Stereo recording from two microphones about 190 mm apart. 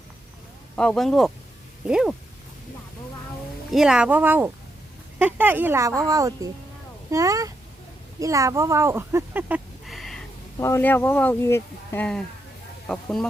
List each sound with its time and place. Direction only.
0.8 s speech: 5° left (ahead or behind)
3.7 s speech: 5° right (ahead or behind)
10.6 s speech: 15° left (ahead or behind)